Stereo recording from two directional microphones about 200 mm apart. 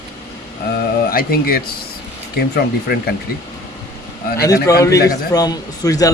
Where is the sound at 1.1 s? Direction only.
50° left (ahead or behind).